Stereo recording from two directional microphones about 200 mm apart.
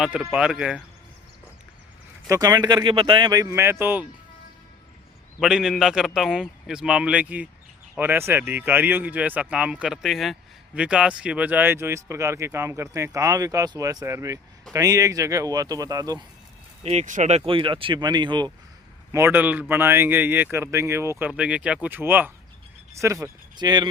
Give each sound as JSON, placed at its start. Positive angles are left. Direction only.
{"t": 0.0, "sound": "a man's voice", "side_deg": 0}
{"t": 2.3, "sound": "speech", "side_deg": -20}
{"t": 5.4, "sound": "a man's voice", "side_deg": -5}
{"t": 16.8, "sound": "speech", "side_deg": -35}
{"t": 19.1, "sound": "speech", "side_deg": -10}